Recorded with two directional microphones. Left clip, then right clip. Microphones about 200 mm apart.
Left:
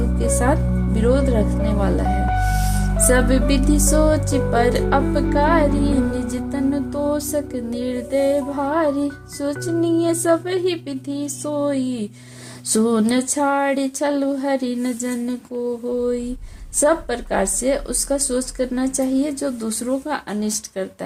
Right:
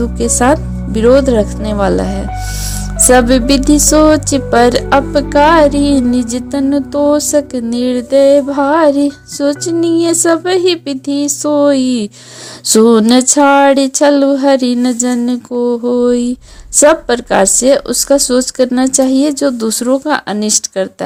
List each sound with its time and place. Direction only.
0.2 s music: 40° right (ahead or behind)
3.1 s music: 40° right (ahead or behind)